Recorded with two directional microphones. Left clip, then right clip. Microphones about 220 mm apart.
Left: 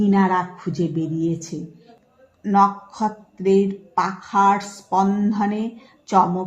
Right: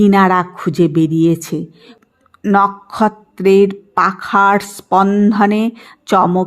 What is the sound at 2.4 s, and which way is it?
Speech, 30° right (ahead or behind).